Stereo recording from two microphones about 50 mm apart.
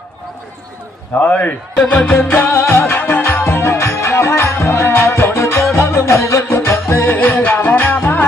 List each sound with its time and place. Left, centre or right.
1.2 s a man's voice: left
1.8 s music: left
2.2 s music: left
4.9 s music: left